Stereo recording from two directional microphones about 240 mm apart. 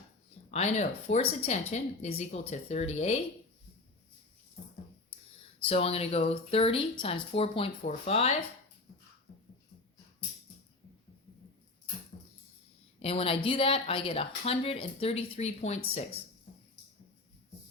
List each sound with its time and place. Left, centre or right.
0.5 s speech: left
5.6 s speech: left
13.0 s speech: left